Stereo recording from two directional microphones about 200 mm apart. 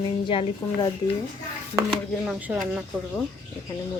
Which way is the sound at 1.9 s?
Centre (ahead or behind).